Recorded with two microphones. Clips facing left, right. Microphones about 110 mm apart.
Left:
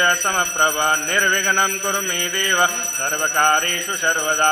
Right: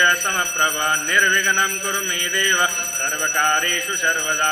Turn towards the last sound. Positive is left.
turn(degrees=40)  # may be behind; listen again after turning